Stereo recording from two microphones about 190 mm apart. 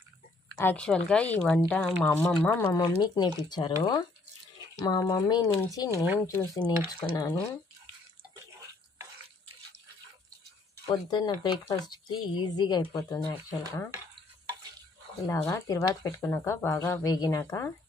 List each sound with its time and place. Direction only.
0.6 s speech: 10° left (ahead or behind)
2.6 s speech: 20° left (ahead or behind)
10.9 s speech: 20° left (ahead or behind)
15.2 s speech: 15° left (ahead or behind)